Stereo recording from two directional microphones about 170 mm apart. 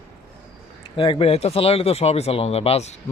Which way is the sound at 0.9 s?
30° left (ahead or behind).